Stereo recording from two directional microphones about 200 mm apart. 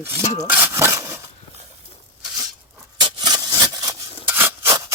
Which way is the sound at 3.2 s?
20° right (ahead or behind).